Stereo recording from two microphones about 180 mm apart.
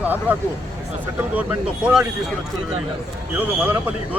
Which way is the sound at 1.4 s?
5° right (ahead or behind).